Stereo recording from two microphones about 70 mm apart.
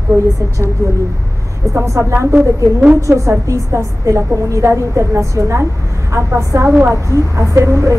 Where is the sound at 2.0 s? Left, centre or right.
Right.